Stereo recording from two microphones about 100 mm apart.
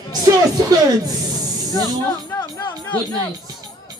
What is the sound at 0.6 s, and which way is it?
Speech, 40° right (ahead or behind).